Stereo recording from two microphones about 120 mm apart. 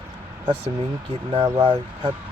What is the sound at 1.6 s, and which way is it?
Speech, 45° right (ahead or behind).